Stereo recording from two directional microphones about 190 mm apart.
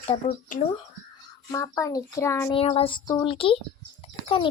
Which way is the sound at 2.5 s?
30° left (ahead or behind).